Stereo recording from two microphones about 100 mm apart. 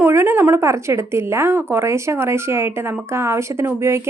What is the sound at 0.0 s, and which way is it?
Speech, 25° right (ahead or behind).